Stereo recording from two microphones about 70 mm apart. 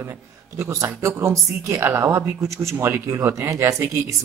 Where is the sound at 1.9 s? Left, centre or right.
Right.